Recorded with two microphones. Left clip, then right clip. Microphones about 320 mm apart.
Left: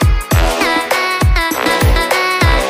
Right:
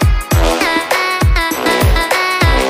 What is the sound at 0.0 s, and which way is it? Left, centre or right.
Music, centre.